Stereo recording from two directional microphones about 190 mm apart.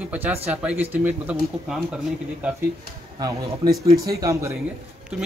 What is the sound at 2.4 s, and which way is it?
Speech, 5° right (ahead or behind).